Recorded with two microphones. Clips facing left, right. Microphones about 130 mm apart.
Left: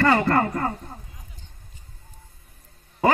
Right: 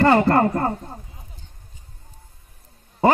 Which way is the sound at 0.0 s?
30° right (ahead or behind).